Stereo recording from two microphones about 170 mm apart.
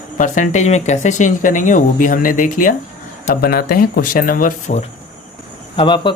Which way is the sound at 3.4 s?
60° left (ahead or behind).